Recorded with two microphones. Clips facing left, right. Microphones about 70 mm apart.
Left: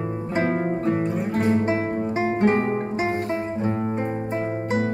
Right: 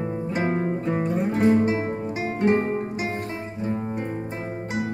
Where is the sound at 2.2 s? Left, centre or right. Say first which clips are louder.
Left 1 dB; left.